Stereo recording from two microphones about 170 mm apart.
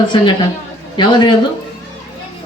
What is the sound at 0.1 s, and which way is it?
Speech, 30° left (ahead or behind).